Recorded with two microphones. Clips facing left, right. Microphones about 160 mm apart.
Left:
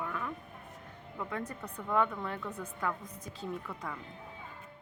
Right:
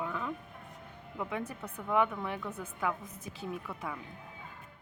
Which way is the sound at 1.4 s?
5° right (ahead or behind).